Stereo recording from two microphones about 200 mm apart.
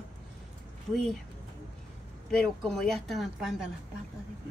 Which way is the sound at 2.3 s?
5° left (ahead or behind).